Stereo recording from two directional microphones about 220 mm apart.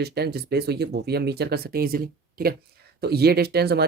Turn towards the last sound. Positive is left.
turn(degrees=-45)  # may be behind; listen again after turning